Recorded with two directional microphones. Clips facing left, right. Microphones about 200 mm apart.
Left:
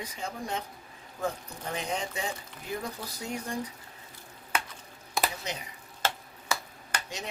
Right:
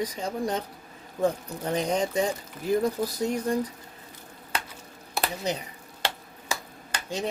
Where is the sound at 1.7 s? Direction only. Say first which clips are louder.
Right 9 dB; 40° right (ahead or behind).